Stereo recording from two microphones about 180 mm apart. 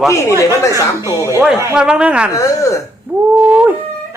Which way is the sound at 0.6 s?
20° left (ahead or behind).